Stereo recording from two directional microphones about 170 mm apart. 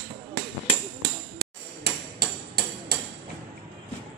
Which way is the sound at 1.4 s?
70° right (ahead or behind).